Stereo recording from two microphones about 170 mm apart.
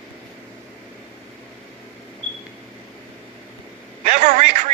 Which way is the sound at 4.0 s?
45° right (ahead or behind).